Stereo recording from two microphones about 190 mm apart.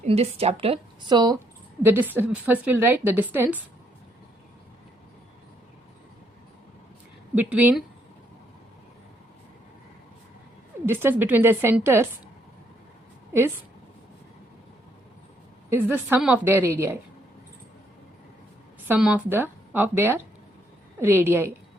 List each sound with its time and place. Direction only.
0.0 s a woman's voice: 30° right (ahead or behind)
1.8 s a woman's voice: 10° right (ahead or behind)
7.3 s a woman's voice: 10° right (ahead or behind)
10.8 s a woman's voice: 10° right (ahead or behind)
15.7 s a woman's voice: 10° right (ahead or behind)
18.9 s a woman's voice: 5° right (ahead or behind)